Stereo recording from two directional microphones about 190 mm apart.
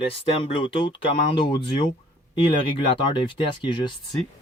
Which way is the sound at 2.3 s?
25° left (ahead or behind).